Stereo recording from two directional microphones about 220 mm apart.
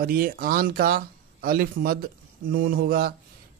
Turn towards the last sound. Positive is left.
turn(degrees=-40)  # may be behind; listen again after turning